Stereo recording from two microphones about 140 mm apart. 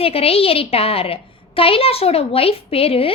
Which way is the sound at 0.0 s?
45° left (ahead or behind).